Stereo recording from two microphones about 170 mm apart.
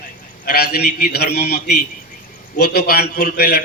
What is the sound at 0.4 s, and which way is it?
A man's voice, 65° left (ahead or behind).